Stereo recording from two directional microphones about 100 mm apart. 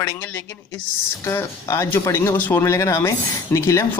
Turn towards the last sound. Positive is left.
turn(degrees=30)  # may be behind; listen again after turning